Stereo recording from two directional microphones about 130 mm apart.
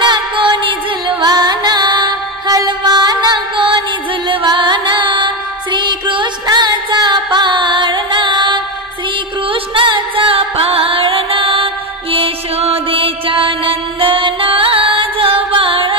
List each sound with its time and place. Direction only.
0.0 s music: 35° right (ahead or behind)